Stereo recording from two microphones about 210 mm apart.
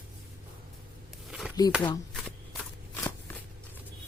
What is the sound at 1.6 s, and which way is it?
Speech, 20° left (ahead or behind).